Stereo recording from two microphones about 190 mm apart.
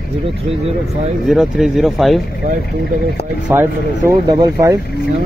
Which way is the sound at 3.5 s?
10° right (ahead or behind).